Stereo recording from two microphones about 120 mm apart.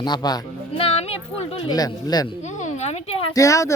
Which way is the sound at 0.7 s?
55° left (ahead or behind).